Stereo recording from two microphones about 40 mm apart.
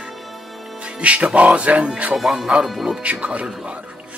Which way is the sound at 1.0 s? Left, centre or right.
Right.